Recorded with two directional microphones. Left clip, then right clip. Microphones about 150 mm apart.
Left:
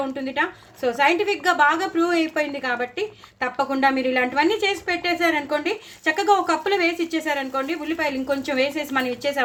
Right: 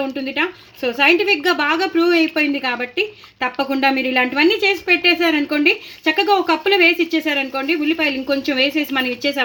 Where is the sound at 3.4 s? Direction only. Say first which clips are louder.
Right 3 dB; 55° right (ahead or behind).